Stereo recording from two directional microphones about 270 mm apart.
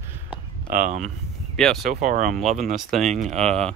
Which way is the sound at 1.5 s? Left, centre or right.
Centre.